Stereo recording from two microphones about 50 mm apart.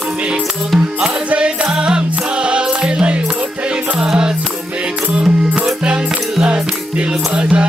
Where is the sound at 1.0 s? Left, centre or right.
Right.